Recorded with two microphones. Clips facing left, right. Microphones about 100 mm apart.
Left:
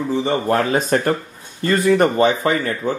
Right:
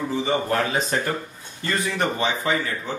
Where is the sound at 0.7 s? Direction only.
50° left (ahead or behind).